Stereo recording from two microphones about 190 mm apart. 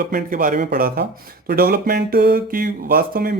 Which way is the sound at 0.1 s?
45° right (ahead or behind).